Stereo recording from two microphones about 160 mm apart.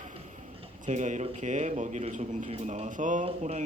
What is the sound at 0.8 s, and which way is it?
Speech, 50° right (ahead or behind).